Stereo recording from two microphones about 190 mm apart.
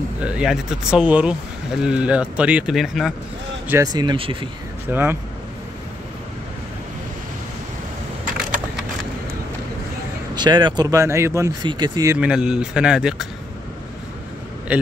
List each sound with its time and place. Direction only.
0.2 s speech: 5° right (ahead or behind)
3.6 s speech: 15° right (ahead or behind)
4.9 s speech: 10° right (ahead or behind)
10.3 s speech: 25° right (ahead or behind)
12.2 s speech: 5° right (ahead or behind)
14.7 s speech: 5° right (ahead or behind)